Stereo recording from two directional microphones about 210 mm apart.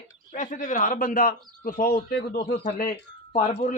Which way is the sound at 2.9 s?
30° left (ahead or behind).